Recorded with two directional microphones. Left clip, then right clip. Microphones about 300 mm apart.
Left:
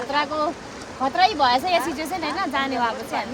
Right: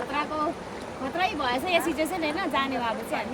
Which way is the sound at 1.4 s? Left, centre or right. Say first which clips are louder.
Left 5 dB; centre.